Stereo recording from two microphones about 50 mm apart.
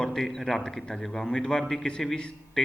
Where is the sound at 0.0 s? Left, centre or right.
Centre.